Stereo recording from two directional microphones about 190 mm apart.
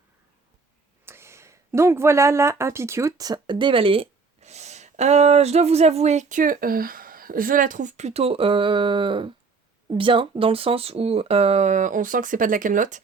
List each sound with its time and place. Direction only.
1.0 s speech: 15° right (ahead or behind); by 13.0 s 45° right (ahead or behind)